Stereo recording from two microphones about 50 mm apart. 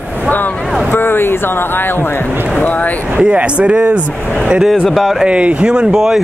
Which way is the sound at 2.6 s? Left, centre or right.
Left.